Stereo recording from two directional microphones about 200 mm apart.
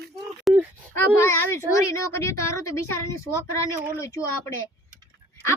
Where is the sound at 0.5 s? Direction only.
Centre (ahead or behind).